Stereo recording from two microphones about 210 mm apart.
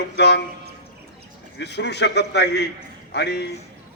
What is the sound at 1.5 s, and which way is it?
A man's voice, 55° left (ahead or behind).